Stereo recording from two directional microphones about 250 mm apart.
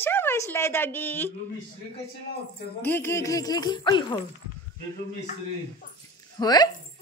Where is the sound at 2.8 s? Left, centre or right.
Centre.